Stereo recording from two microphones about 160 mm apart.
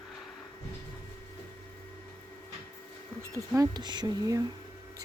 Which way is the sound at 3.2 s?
20° right (ahead or behind).